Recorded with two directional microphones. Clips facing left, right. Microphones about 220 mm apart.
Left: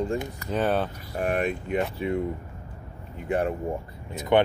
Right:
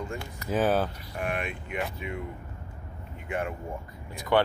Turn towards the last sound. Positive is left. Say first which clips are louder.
# left 3 dB
turn(degrees=20)  # may be behind; listen again after turning